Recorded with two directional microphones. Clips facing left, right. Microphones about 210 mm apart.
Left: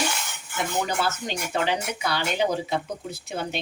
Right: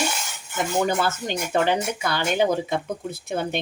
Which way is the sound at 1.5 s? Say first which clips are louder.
Right 5 dB; 50° right (ahead or behind).